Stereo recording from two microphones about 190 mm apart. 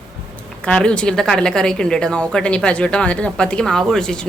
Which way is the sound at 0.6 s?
5° left (ahead or behind).